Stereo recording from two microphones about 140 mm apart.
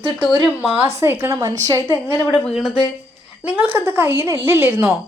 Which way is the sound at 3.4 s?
15° right (ahead or behind).